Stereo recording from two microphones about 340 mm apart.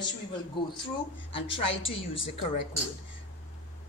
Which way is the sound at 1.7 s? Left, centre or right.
Left.